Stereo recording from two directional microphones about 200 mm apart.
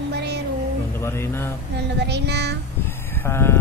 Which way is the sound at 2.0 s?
55° right (ahead or behind).